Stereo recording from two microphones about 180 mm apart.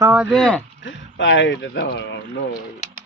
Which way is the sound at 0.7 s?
90° left.